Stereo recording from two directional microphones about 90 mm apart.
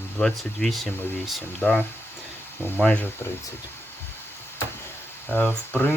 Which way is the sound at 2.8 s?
15° left (ahead or behind).